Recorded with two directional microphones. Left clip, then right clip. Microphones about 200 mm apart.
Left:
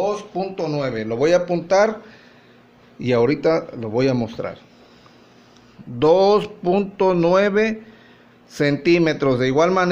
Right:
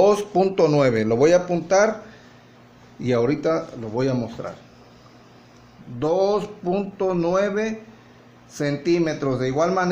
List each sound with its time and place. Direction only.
0.0 s speech: 45° right (ahead or behind)
1.5 s speech: 5° left (ahead or behind)
3.0 s speech: 15° left (ahead or behind); by 4.5 s 35° left (ahead or behind)
5.9 s speech: 35° left (ahead or behind)